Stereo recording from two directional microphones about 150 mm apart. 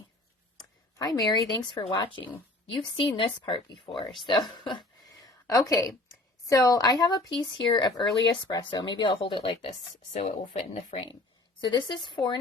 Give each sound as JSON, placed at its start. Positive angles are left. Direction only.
{"t": 0.9, "sound": "speech", "side_deg": 25}
{"t": 5.2, "sound": "a sound", "side_deg": 25}
{"t": 6.5, "sound": "speech", "side_deg": 20}
{"t": 10.1, "sound": "speech", "side_deg": 45}
{"t": 11.6, "sound": "speech", "side_deg": 30}